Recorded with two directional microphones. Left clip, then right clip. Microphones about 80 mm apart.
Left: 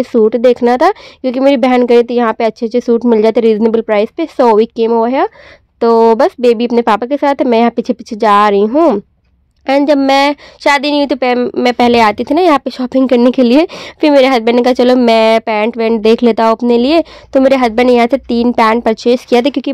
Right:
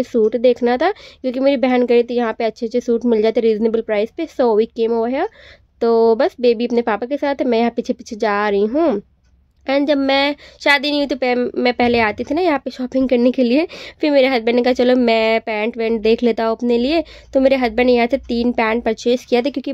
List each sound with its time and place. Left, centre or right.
0.1 s speech: centre
8.6 s speech: centre
9.7 s speech: centre
11.6 s speech: left
11.9 s a woman's voice: left
19.3 s speech: left